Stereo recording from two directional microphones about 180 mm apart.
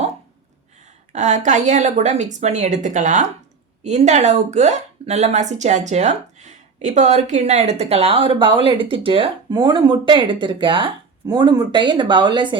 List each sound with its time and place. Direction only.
1.1 s a woman's voice: 40° right (ahead or behind); by 12.5 s 25° right (ahead or behind)